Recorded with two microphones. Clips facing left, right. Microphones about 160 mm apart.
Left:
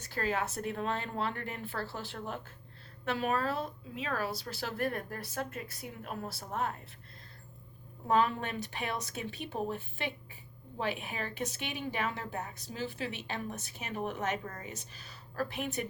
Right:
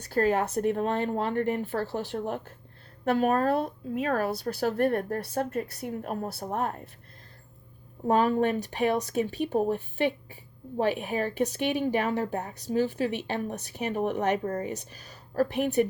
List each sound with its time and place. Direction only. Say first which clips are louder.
0.1 s a woman's voice: right 9 dB; 50° right (ahead or behind)
1.8 s speech: right 9 dB; 20° right (ahead or behind)
3.0 s a woman's voice: right 8 dB; 45° right (ahead or behind)
5.8 s a woman's voice: right 8 dB; 45° right (ahead or behind)
8.0 s a woman's voice: right 6 dB; 40° right (ahead or behind)
13.5 s speech: right 9 dB; 55° right (ahead or behind)
14.2 s a woman's voice: right 9 dB; 35° right (ahead or behind)